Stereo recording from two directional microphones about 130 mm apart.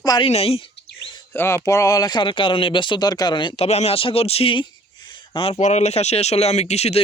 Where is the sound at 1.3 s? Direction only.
15° left (ahead or behind); by 5.5 s 45° left (ahead or behind).